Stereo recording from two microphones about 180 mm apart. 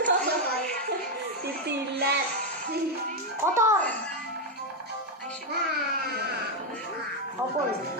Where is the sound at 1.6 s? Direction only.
65° right (ahead or behind).